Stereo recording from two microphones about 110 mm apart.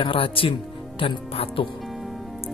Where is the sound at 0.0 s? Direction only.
55° left (ahead or behind).